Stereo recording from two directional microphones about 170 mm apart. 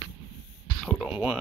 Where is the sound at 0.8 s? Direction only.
5° right (ahead or behind).